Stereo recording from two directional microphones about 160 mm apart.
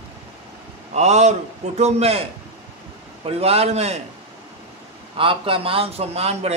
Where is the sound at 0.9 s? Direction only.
45° right (ahead or behind).